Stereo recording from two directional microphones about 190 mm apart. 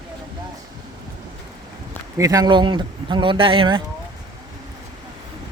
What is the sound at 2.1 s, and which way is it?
Speech, 20° right (ahead or behind).